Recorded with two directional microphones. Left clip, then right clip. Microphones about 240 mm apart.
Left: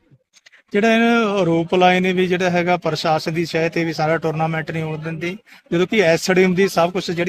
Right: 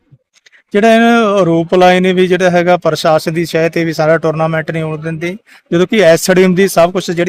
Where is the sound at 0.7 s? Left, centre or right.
Right.